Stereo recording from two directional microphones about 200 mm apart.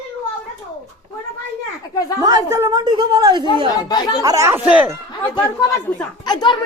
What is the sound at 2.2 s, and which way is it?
A woman's voice, 15° right (ahead or behind).